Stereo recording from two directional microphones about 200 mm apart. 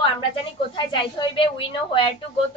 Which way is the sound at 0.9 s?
25° left (ahead or behind).